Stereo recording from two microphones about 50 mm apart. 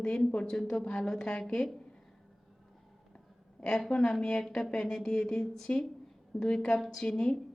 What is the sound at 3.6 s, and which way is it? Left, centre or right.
A woman's voice, centre.